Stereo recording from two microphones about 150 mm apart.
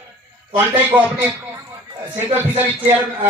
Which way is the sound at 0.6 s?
15° right (ahead or behind).